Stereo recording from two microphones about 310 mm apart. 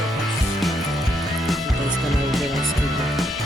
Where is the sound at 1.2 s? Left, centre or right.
Centre.